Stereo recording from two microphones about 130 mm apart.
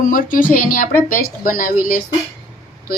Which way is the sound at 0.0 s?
90° left.